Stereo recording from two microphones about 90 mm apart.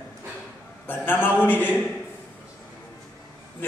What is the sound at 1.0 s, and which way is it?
Speech, 20° left (ahead or behind).